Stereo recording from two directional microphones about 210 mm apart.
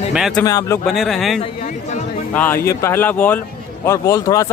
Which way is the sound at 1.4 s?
35° left (ahead or behind).